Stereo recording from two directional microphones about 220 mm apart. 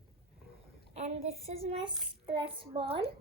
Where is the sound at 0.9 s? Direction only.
30° right (ahead or behind).